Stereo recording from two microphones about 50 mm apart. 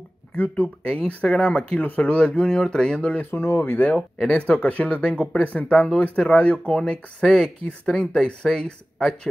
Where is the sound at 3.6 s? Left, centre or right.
Left.